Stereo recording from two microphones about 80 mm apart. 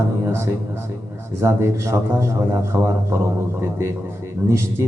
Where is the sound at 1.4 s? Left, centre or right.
Right.